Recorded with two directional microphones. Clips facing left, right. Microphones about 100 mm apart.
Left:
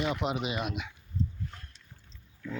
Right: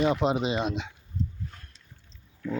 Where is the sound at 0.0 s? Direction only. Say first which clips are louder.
Right 6 dB; 30° right (ahead or behind).